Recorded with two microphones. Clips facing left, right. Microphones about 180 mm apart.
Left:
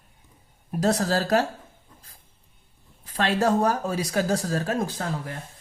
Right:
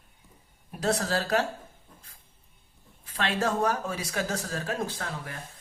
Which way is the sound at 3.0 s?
40° left (ahead or behind).